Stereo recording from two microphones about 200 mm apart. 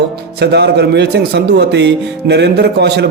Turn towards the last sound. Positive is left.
turn(degrees=-55)  # may be behind; listen again after turning